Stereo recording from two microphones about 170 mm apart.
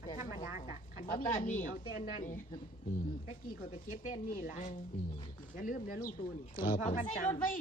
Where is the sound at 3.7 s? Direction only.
50° left (ahead or behind).